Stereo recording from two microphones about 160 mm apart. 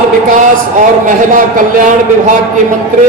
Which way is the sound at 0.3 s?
55° right (ahead or behind).